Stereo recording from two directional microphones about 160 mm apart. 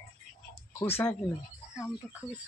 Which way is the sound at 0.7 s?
15° left (ahead or behind).